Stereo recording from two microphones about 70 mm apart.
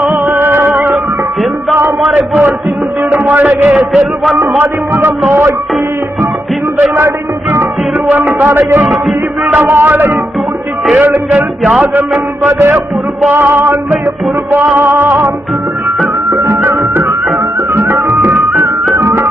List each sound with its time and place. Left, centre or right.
0.3 s music: right
2.1 s speech: right
3.7 s a man's voice: centre
4.4 s music: right
5.3 s music: right
8.1 s speech: right
12.4 s music: right
14.8 s speech: right
16.3 s music: right
16.6 s music: right
18.1 s music: right